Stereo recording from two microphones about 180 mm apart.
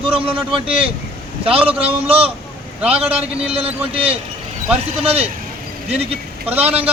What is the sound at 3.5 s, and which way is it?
A man's voice, 35° right (ahead or behind).